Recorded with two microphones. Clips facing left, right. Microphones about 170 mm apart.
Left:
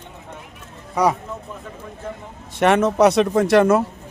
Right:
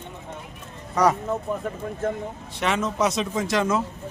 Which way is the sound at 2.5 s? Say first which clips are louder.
Left 9 dB; 60° left (ahead or behind).